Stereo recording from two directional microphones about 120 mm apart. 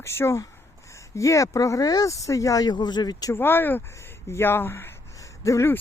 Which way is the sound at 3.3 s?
20° left (ahead or behind).